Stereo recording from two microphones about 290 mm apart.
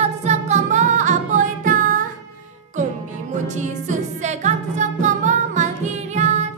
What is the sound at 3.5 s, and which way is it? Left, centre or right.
Music, right.